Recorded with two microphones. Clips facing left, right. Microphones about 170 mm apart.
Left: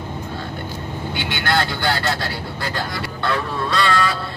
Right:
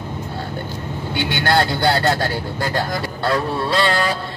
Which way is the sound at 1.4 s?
40° right (ahead or behind).